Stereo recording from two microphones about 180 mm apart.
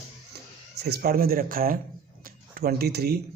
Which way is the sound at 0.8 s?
60° right (ahead or behind).